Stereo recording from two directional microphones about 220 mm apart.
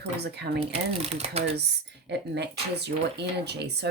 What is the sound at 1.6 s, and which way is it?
Speech, 50° right (ahead or behind).